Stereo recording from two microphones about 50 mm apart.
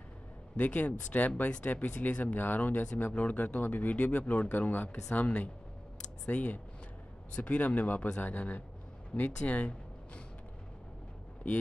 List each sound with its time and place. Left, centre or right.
0.6 s speech: left